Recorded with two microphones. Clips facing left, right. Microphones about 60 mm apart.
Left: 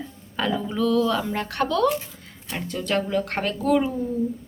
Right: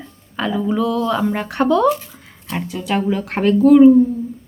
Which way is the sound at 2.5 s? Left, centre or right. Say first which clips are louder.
Right 4 dB; centre.